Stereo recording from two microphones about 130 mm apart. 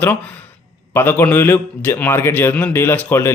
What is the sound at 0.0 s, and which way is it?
Speech, 15° left (ahead or behind).